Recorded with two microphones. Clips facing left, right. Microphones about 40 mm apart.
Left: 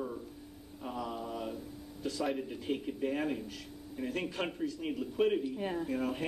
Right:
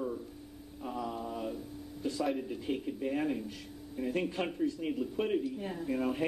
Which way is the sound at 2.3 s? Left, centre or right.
Centre.